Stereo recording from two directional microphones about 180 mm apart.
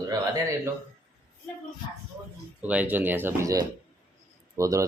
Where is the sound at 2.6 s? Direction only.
10° right (ahead or behind).